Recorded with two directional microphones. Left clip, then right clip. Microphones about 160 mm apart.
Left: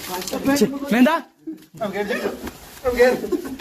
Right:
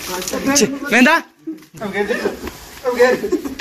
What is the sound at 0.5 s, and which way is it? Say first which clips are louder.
Speech: right 6 dB; 20° left (ahead or behind).